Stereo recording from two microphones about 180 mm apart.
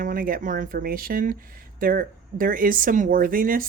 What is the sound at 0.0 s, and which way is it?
Speech, 50° right (ahead or behind).